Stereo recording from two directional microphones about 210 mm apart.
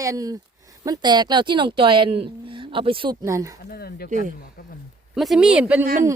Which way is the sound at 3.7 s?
45° left (ahead or behind).